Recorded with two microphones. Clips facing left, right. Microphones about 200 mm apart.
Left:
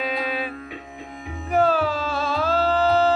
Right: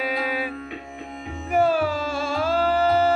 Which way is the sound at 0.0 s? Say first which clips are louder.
Even; 10° right (ahead or behind).